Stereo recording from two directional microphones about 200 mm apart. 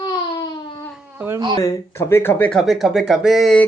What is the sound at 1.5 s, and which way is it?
Speech, 15° left (ahead or behind).